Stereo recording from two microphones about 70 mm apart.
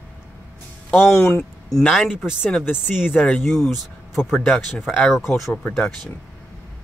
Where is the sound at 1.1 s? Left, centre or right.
Left.